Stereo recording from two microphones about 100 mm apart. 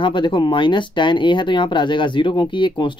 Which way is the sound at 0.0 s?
55° left (ahead or behind).